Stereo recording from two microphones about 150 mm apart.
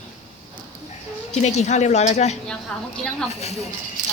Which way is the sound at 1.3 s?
50° left (ahead or behind).